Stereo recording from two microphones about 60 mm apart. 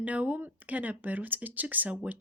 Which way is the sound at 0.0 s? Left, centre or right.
Right.